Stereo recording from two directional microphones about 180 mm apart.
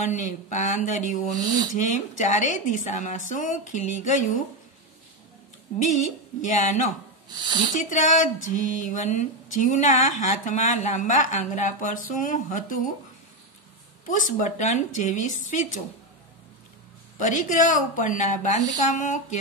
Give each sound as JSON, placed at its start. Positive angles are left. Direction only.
{"t": 0.0, "sound": "a woman's voice", "side_deg": 40}
{"t": 1.3, "sound": "speech", "side_deg": -20}
{"t": 1.8, "sound": "a woman's voice", "side_deg": 45}
{"t": 6.4, "sound": "a woman's voice", "side_deg": 45}
{"t": 7.2, "sound": "speech", "side_deg": -25}
{"t": 7.7, "sound": "a woman's voice", "side_deg": 45}
{"t": 14.0, "sound": "a woman's voice", "side_deg": 45}
{"t": 17.2, "sound": "a woman's voice", "side_deg": 45}